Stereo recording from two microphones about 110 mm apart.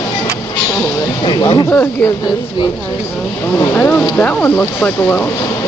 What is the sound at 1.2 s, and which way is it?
Speech, 45° left (ahead or behind).